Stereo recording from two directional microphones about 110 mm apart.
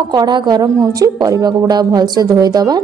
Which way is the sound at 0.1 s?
40° right (ahead or behind).